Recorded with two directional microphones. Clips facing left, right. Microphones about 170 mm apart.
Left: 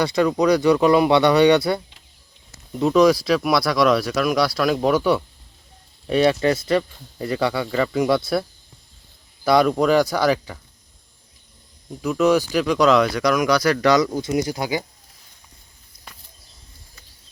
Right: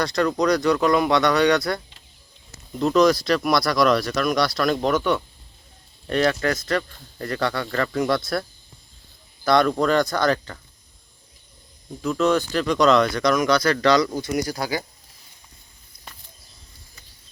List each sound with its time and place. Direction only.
0.0 s speech: 5° left (ahead or behind)
6.4 s speech: 30° left (ahead or behind)
7.2 s speech: 10° left (ahead or behind)
12.0 s speech: 10° left (ahead or behind)